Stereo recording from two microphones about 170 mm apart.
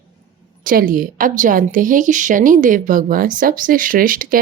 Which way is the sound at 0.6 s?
55° right (ahead or behind).